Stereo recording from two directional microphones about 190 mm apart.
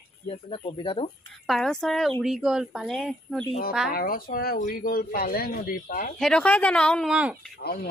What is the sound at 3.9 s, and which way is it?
Speech, 50° left (ahead or behind).